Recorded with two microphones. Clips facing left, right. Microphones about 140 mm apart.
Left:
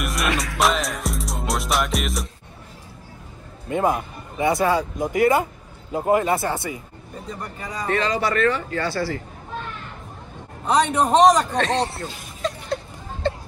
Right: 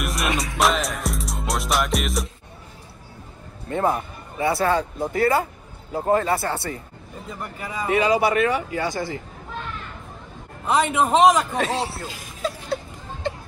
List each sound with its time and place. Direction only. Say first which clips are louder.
0.0 s music: left 1 dB; centre (ahead or behind)
3.6 s a man's voice: left 1 dB; 15° left (ahead or behind)
7.2 s speech: even; 5° right (ahead or behind)
10.7 s a man's voice: left 1 dB; 5° right (ahead or behind)
12.4 s a sound: left 1 dB; 5° right (ahead or behind)
13.2 s hubbub: left 4 dB; 15° right (ahead or behind)